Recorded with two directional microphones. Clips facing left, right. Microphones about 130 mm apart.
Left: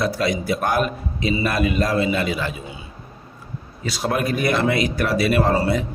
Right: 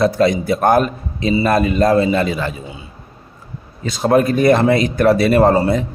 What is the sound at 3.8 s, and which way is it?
A man's voice, 35° right (ahead or behind).